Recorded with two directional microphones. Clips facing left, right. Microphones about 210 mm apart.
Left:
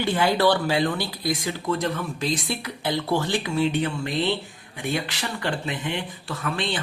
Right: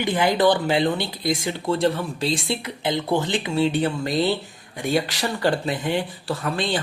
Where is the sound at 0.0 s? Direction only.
15° right (ahead or behind).